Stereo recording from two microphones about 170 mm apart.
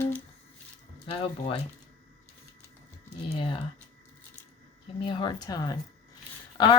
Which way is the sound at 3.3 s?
30° left (ahead or behind).